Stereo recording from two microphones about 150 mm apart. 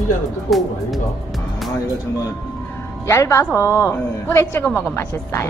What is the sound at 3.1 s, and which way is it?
A woman's voice, 20° left (ahead or behind).